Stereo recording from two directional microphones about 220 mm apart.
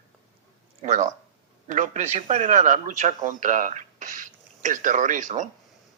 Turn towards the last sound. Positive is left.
turn(degrees=-35)  # may be behind; listen again after turning